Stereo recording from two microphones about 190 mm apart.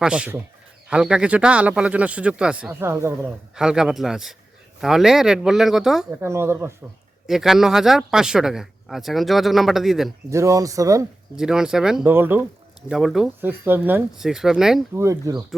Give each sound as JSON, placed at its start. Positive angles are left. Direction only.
{"t": 0.0, "sound": "speech", "side_deg": -5}
{"t": 7.3, "sound": "speech", "side_deg": 0}
{"t": 10.2, "sound": "speech", "side_deg": -15}
{"t": 11.3, "sound": "speech", "side_deg": -5}
{"t": 14.9, "sound": "speech", "side_deg": -15}